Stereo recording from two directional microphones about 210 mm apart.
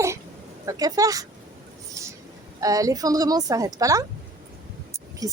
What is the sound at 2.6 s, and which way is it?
Speech, 15° right (ahead or behind).